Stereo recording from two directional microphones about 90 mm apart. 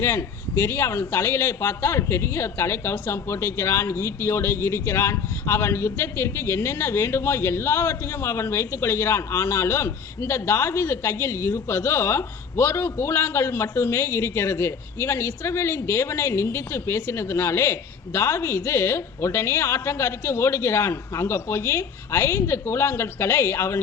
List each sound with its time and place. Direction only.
0.0 s speech: 30° left (ahead or behind)